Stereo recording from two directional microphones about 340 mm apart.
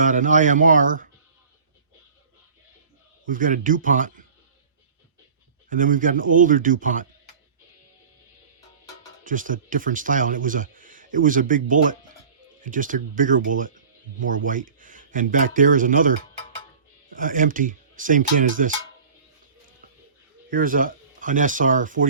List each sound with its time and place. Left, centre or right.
0.0 s speech: right
3.2 s speech: right
5.6 s speech: right
9.2 s speech: right
17.2 s speech: right
20.5 s speech: right